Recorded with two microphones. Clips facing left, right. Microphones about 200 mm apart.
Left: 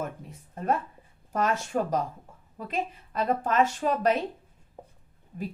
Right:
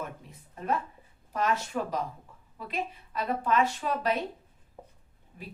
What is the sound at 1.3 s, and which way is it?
A woman's voice, 45° left (ahead or behind).